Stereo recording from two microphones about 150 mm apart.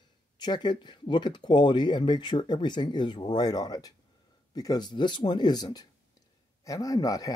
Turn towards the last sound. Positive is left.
turn(degrees=25)  # may be behind; listen again after turning